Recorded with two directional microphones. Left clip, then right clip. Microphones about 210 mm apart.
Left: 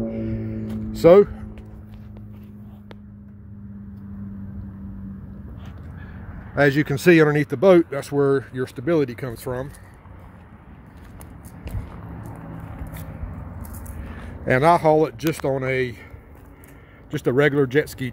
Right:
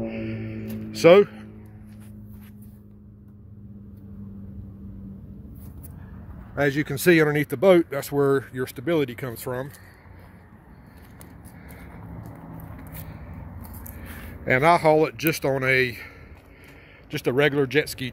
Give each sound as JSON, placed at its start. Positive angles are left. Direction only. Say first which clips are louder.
{"t": 0.0, "sound": "music", "louder": "left 3 dB", "side_deg": 50}
{"t": 0.9, "sound": "music", "louder": "left 2 dB", "side_deg": 5}
{"t": 6.5, "sound": "speech", "louder": "left 5 dB", "side_deg": 10}
{"t": 14.4, "sound": "speech", "louder": "left 2 dB", "side_deg": 10}
{"t": 17.1, "sound": "speech", "louder": "left 2 dB", "side_deg": 15}